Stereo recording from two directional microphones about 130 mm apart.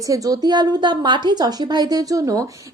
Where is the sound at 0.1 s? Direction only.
30° right (ahead or behind).